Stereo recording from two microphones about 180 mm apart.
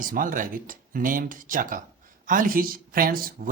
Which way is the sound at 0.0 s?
50° right (ahead or behind).